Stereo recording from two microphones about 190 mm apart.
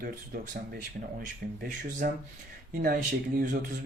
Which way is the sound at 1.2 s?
50° right (ahead or behind).